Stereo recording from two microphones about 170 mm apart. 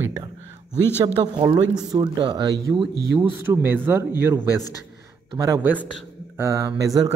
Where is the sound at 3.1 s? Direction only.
10° right (ahead or behind).